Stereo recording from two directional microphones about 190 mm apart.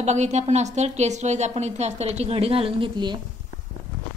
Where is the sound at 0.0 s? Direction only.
35° right (ahead or behind).